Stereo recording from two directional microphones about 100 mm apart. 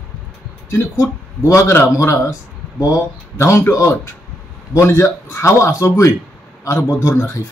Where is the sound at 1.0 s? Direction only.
25° left (ahead or behind).